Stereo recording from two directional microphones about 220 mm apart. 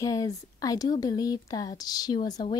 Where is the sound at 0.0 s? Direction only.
15° left (ahead or behind).